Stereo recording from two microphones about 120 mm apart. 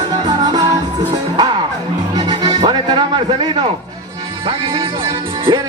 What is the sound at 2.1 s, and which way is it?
Music, 35° right (ahead or behind).